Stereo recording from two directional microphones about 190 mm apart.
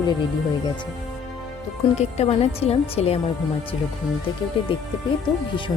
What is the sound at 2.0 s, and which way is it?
A woman's voice, 35° left (ahead or behind).